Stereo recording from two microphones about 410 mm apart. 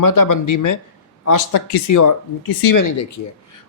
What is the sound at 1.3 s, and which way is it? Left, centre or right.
Speech, left.